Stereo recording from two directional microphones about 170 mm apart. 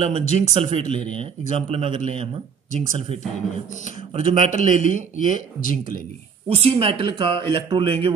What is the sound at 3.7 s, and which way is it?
Speech, 50° left (ahead or behind).